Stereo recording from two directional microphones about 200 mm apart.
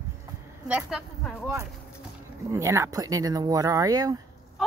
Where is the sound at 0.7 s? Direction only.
5° right (ahead or behind).